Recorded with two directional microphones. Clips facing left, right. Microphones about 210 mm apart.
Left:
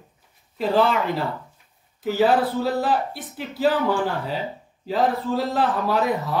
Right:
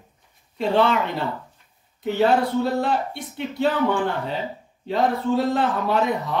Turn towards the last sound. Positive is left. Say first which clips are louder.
# even
turn(degrees=0)  # may be behind; listen again after turning